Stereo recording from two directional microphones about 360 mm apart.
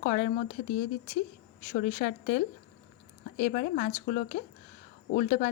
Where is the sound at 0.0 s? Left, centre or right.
Left.